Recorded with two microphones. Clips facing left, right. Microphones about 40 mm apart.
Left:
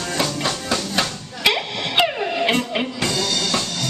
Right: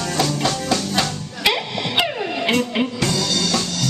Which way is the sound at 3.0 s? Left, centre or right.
Left.